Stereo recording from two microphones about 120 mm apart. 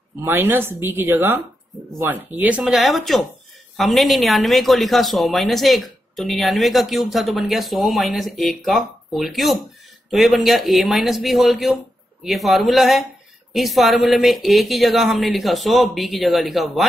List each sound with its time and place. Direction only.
0.2 s speech: 20° right (ahead or behind); by 16.8 s centre (ahead or behind)